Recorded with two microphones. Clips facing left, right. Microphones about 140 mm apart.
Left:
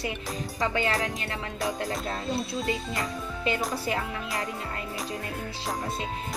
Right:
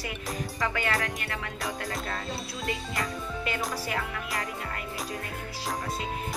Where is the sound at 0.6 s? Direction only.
25° left (ahead or behind).